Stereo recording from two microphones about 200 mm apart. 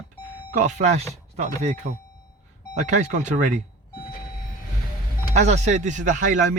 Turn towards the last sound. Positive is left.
turn(degrees=-40)  # may be behind; listen again after turning